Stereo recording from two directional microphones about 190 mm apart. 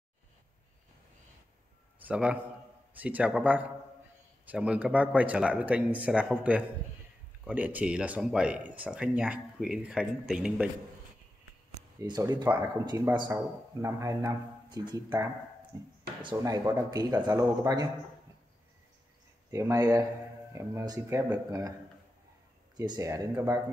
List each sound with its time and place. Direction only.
2.0 s a man's voice: 5° right (ahead or behind)
12.0 s speech: 20° right (ahead or behind)
12.4 s speech: 10° right (ahead or behind)
19.5 s speech: 15° right (ahead or behind)
22.8 s speech: 20° right (ahead or behind)